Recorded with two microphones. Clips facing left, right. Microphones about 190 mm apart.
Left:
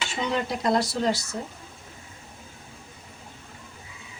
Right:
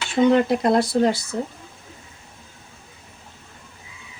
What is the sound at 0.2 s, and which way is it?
Speech, 55° right (ahead or behind).